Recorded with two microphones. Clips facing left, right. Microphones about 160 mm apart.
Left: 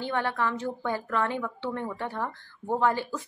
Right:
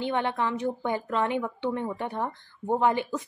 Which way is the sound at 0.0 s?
20° right (ahead or behind).